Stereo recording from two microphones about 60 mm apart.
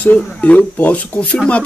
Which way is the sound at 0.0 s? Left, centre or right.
Left.